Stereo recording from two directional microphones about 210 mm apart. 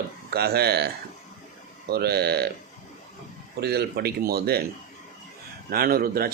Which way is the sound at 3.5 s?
50° right (ahead or behind).